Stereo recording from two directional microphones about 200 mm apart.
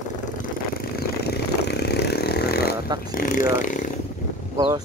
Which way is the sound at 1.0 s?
55° left (ahead or behind).